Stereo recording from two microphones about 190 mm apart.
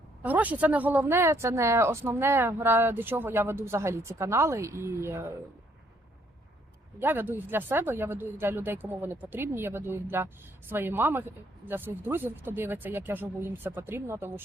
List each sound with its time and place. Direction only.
0.2 s speech: 10° right (ahead or behind)
7.0 s speech: 10° right (ahead or behind)